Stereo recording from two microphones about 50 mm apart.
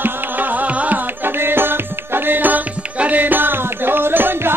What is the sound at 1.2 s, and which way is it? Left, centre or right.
Music, right.